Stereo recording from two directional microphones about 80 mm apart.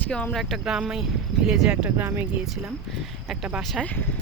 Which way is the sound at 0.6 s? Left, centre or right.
Centre.